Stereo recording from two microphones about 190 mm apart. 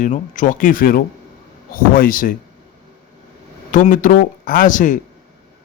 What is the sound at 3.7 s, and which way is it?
A man's voice, 45° left (ahead or behind).